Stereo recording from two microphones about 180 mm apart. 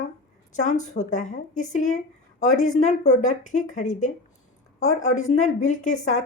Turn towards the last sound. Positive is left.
turn(degrees=45)  # may be behind; listen again after turning